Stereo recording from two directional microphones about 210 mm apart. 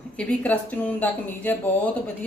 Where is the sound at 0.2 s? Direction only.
5° left (ahead or behind).